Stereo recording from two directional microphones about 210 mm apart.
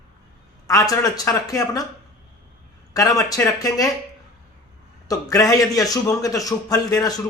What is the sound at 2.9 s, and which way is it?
Speech, 15° left (ahead or behind).